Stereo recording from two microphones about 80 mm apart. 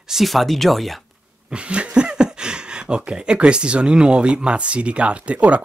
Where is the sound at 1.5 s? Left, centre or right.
Centre.